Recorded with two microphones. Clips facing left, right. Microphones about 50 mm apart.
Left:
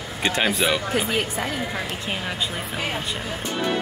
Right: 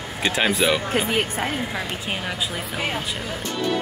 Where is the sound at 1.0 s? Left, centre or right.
Right.